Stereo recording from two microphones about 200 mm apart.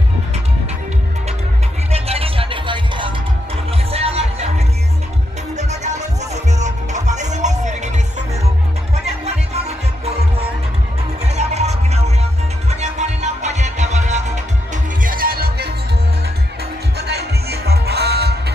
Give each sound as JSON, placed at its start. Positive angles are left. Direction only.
{"t": 1.9, "sound": "music", "side_deg": -30}
{"t": 6.3, "sound": "music", "side_deg": -35}
{"t": 11.2, "sound": "music", "side_deg": -35}
{"t": 15.0, "sound": "music", "side_deg": -45}
{"t": 17.0, "sound": "music", "side_deg": -55}